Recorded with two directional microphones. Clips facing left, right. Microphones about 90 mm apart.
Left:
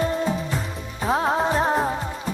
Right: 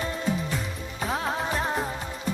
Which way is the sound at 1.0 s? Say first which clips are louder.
Left 8 dB; 35° left (ahead or behind).